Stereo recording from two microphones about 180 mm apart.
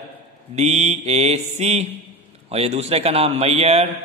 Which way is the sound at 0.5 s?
35° right (ahead or behind).